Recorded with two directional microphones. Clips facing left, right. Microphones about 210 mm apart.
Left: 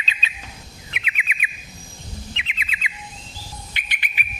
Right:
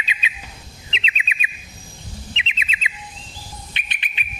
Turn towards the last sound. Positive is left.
turn(degrees=-25)  # may be behind; listen again after turning